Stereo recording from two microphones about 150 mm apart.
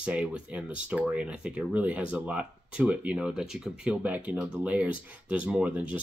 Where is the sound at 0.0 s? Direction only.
10° right (ahead or behind).